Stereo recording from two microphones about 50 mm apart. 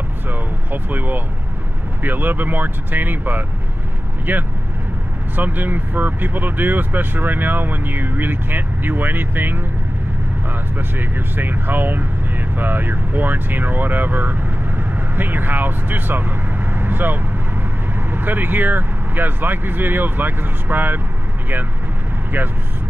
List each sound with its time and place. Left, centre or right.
0.3 s speech: right
10.8 s speech: right